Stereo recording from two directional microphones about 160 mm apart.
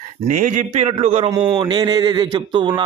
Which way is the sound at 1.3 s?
25° right (ahead or behind).